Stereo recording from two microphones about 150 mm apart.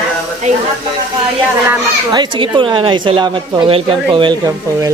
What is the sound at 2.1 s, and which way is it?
Speech, 30° right (ahead or behind).